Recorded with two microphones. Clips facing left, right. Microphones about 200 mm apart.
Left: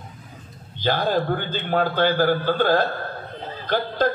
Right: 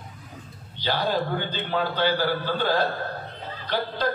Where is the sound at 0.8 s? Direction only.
50° left (ahead or behind).